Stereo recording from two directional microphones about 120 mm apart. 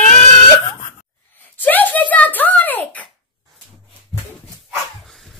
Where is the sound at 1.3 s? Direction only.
15° left (ahead or behind).